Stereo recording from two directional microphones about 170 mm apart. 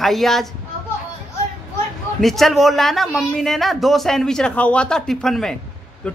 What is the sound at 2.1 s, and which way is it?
A man's voice, centre (ahead or behind).